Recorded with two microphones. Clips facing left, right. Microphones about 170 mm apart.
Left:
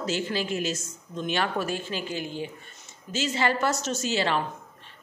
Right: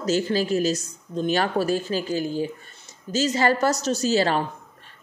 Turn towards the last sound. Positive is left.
turn(degrees=-40)  # may be behind; listen again after turning